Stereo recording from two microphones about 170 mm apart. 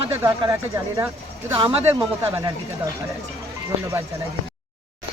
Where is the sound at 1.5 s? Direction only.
35° right (ahead or behind).